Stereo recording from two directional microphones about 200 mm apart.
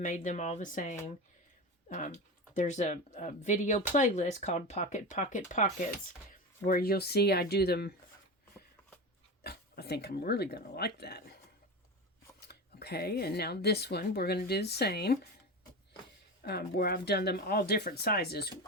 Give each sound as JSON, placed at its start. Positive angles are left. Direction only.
{"t": 0.0, "sound": "speech", "side_deg": 40}
{"t": 6.7, "sound": "speech", "side_deg": 50}
{"t": 9.4, "sound": "speech", "side_deg": 55}
{"t": 12.4, "sound": "speech", "side_deg": 55}
{"t": 16.4, "sound": "speech", "side_deg": 50}